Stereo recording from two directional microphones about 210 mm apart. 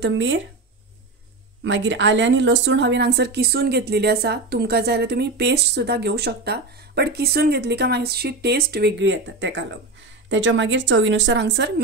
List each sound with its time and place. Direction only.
0.0 s speech: 60° right (ahead or behind)
1.6 s a woman's voice: 60° right (ahead or behind)